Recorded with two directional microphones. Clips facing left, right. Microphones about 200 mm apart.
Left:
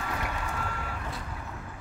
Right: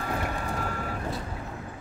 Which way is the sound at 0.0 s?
40° right (ahead or behind).